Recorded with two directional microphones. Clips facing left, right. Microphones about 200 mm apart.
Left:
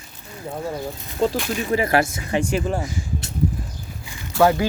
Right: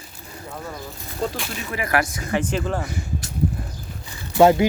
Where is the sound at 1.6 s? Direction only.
30° left (ahead or behind).